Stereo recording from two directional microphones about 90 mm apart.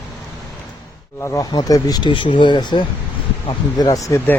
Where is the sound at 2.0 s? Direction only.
65° left (ahead or behind).